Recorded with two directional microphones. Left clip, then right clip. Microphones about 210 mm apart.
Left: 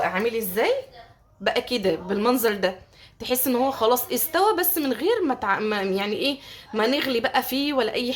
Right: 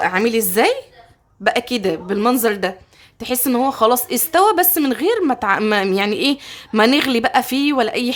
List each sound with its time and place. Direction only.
0.0 s a woman's voice: 55° right (ahead or behind)
1.5 s a woman's voice: 30° right (ahead or behind)